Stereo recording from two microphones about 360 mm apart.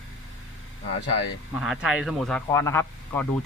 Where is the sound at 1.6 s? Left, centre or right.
Centre.